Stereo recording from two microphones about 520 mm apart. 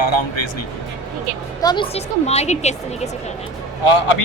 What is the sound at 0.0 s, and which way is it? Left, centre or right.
Speech, left.